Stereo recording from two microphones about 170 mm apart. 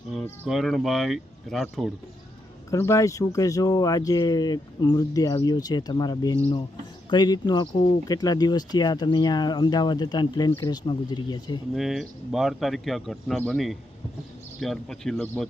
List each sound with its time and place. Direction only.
0.1 s insect: centre (ahead or behind)
0.4 s speech: centre (ahead or behind)
2.6 s speech: 15° left (ahead or behind)
11.7 s speech: centre (ahead or behind)